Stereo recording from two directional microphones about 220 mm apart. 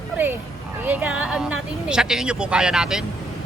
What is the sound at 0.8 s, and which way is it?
Speech, 10° right (ahead or behind).